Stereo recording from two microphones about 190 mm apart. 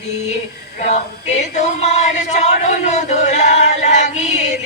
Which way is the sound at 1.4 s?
40° left (ahead or behind).